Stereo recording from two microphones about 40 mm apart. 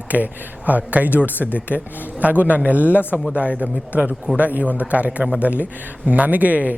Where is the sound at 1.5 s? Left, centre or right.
Right.